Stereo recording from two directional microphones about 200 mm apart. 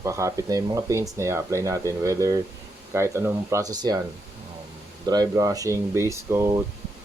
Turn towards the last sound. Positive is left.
turn(degrees=-15)  # may be behind; listen again after turning